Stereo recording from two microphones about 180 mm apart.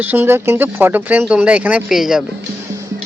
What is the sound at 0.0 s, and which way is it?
A man's voice, 10° right (ahead or behind).